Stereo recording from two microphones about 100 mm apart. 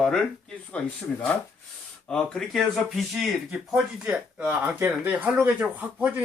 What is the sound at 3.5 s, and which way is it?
Speech, 10° right (ahead or behind).